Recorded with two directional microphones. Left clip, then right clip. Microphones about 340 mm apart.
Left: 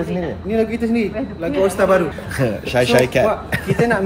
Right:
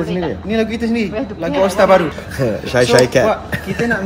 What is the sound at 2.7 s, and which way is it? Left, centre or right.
Speech, centre.